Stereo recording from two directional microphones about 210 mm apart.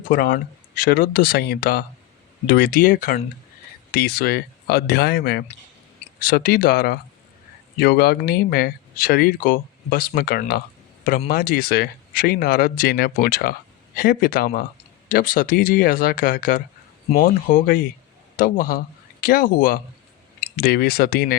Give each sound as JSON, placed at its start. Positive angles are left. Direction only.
{"t": 0.1, "sound": "speech", "side_deg": 45}